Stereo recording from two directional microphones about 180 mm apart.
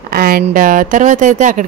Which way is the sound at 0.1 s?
55° right (ahead or behind).